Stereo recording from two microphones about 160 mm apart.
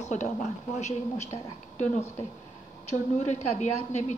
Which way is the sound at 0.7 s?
45° left (ahead or behind).